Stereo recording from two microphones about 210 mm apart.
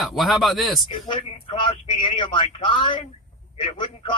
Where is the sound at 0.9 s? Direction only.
25° left (ahead or behind).